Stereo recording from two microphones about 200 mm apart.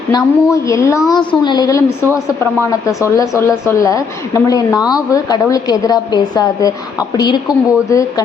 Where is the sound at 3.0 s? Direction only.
15° left (ahead or behind).